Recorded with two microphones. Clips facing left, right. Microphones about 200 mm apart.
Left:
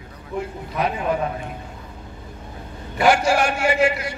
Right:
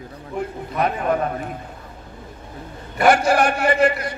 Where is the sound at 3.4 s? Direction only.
55° right (ahead or behind).